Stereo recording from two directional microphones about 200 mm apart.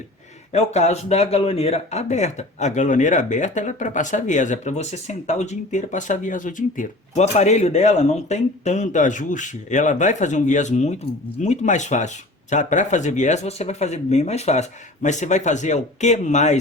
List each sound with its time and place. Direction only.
0.5 s speech: 35° left (ahead or behind)